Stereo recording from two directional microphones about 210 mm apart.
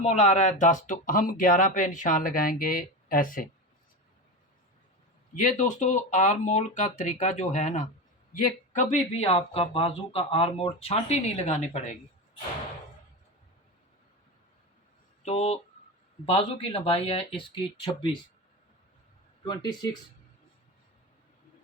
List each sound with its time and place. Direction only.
0.0 s speech: 35° left (ahead or behind)
5.3 s speech: 40° left (ahead or behind)
15.2 s speech: 30° left (ahead or behind)
19.5 s speech: 20° left (ahead or behind)